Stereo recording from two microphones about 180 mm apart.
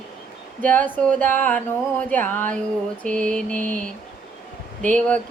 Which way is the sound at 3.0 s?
5° left (ahead or behind).